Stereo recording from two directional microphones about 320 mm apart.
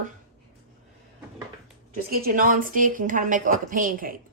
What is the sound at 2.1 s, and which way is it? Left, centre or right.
A woman's voice, right.